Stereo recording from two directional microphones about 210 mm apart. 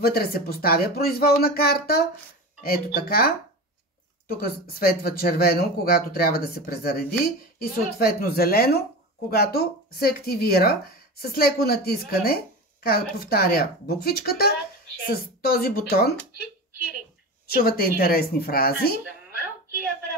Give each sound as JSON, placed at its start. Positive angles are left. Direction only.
{"t": 0.0, "sound": "speech", "side_deg": 45}
{"t": 17.5, "sound": "speech", "side_deg": 45}